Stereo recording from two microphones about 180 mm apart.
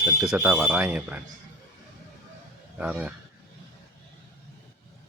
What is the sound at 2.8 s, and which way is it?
Speech, 5° right (ahead or behind).